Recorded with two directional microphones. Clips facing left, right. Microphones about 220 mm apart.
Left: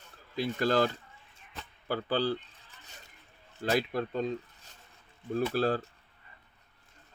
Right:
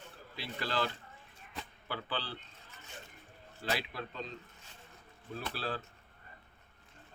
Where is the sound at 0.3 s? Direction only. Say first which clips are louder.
Left 9 dB; 45° left (ahead or behind).